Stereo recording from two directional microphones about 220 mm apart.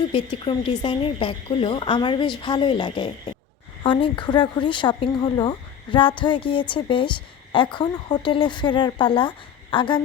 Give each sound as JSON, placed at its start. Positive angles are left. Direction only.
{"t": 0.1, "sound": "speech", "side_deg": 25}